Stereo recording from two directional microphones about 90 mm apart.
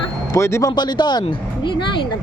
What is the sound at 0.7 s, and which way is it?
Speech, 55° left (ahead or behind).